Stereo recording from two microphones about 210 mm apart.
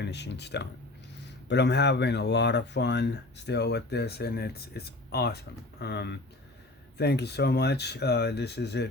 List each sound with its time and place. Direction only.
0.0 s speech: 55° left (ahead or behind)